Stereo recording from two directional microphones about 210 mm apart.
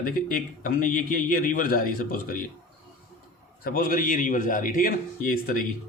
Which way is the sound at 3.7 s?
40° left (ahead or behind).